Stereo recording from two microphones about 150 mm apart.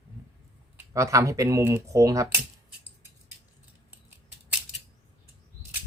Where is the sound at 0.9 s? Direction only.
20° right (ahead or behind).